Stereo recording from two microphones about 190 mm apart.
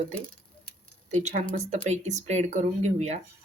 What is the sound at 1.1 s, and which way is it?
Speech, 35° right (ahead or behind).